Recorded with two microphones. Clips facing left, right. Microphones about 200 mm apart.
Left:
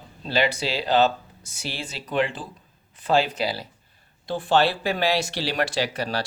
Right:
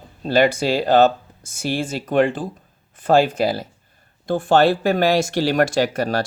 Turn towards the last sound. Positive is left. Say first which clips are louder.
# right 7 dB
turn(degrees=-50)  # may be behind; listen again after turning